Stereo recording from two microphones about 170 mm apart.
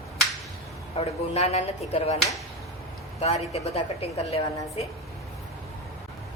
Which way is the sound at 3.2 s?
40° left (ahead or behind).